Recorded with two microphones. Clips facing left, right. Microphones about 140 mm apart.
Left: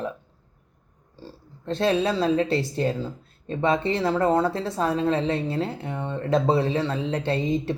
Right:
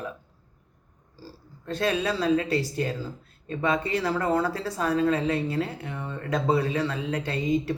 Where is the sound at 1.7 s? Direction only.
25° left (ahead or behind).